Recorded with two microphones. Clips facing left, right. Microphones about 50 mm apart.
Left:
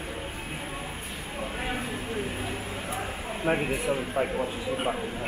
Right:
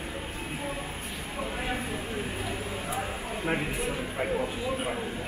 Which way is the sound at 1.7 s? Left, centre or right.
Centre.